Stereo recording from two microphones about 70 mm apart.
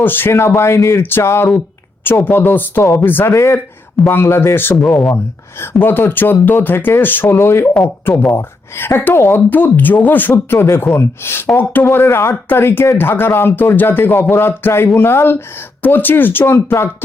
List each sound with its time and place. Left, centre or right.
0.0 s speech: left
2.0 s speech: left
3.3 s speech: left
4.8 s speech: centre
5.1 s speech: left
9.5 s speech: left
11.9 s speech: left